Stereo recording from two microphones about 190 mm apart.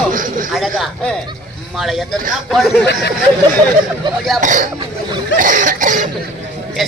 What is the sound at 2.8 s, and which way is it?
Speech, 65° left (ahead or behind).